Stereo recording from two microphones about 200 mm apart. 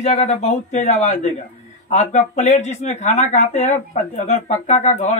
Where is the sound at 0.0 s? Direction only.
35° left (ahead or behind).